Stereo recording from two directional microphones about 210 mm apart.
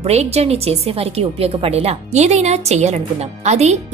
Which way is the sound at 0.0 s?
30° right (ahead or behind).